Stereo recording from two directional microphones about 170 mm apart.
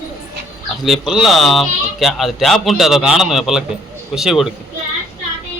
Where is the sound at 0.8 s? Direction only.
Centre (ahead or behind).